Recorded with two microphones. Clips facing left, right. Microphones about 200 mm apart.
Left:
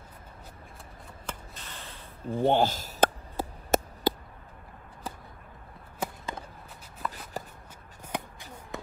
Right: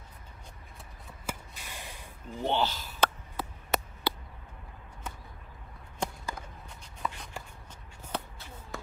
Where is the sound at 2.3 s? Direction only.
50° left (ahead or behind).